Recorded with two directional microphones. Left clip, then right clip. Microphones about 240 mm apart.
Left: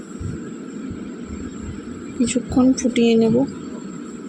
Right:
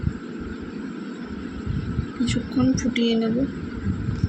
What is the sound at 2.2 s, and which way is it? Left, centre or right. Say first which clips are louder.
A woman's voice: left 5 dB; left.